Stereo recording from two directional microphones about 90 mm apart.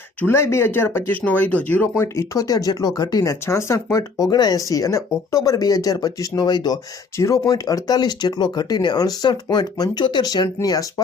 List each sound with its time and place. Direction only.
0.2 s speech: 30° left (ahead or behind)
2.1 s speech: 40° left (ahead or behind)
3.2 s speech: 30° left (ahead or behind); by 6.7 s 50° left (ahead or behind)
7.2 s speech: 35° left (ahead or behind)